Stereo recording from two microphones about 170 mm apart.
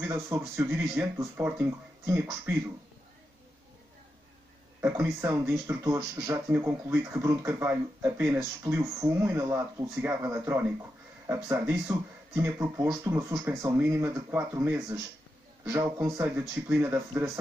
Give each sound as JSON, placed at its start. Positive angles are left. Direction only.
{"t": 0.0, "sound": "speech", "side_deg": -15}
{"t": 4.8, "sound": "speech", "side_deg": -15}